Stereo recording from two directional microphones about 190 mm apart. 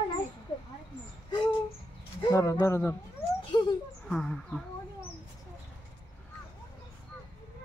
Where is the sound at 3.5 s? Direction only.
25° left (ahead or behind).